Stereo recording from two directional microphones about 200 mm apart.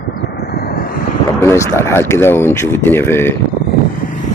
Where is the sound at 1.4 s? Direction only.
15° left (ahead or behind).